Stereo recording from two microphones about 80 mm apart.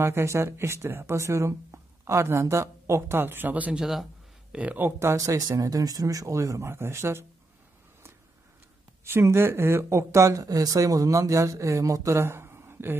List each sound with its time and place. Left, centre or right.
0.0 s speech: right
3.7 s a man's voice: centre
4.5 s speech: centre
4.8 s speech: right
9.0 s speech: right